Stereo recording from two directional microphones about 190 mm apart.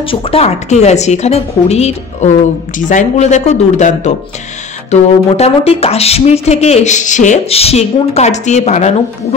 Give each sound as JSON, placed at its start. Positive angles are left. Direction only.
{"t": 0.0, "sound": "speech", "side_deg": 30}